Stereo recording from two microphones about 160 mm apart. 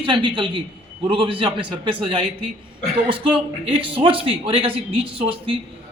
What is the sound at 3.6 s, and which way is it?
A man's voice, 35° right (ahead or behind).